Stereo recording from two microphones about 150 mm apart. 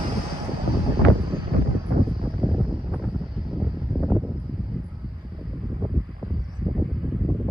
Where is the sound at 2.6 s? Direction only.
5° right (ahead or behind).